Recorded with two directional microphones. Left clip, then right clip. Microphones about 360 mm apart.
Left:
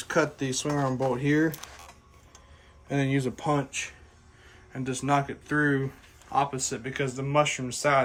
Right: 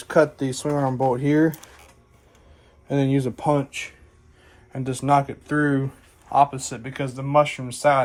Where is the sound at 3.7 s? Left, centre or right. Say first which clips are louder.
Right 2 dB; centre.